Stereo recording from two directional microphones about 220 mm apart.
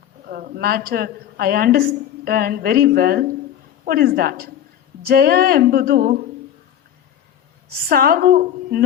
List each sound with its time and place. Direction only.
0.3 s a woman's voice: 40° right (ahead or behind)
7.9 s a woman's voice: 45° right (ahead or behind)